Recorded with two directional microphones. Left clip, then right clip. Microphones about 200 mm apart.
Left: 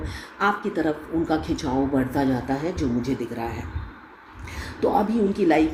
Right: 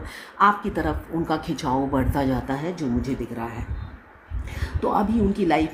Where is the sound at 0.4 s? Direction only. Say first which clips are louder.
Right 3 dB; 40° right (ahead or behind).